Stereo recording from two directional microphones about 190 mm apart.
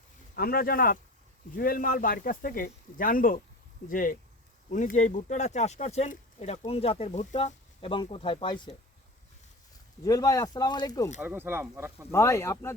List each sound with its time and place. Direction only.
0.3 s speech: 50° left (ahead or behind); by 8.7 s 25° left (ahead or behind)
10.0 s speech: 20° left (ahead or behind)
11.2 s speech: 10° right (ahead or behind)
12.1 s speech: 15° left (ahead or behind)